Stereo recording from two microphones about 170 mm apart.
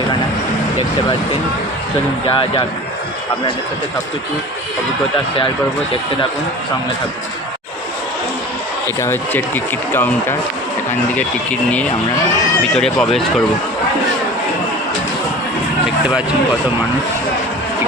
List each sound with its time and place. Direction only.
2.2 s speech: 30° left (ahead or behind)
9.0 s speech: 15° left (ahead or behind)
12.7 s speech: 5° left (ahead or behind)